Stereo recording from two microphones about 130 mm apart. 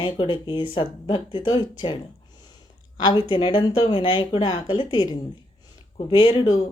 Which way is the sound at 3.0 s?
40° left (ahead or behind).